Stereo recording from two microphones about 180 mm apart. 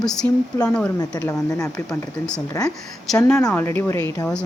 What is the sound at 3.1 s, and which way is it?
Speech, 10° left (ahead or behind).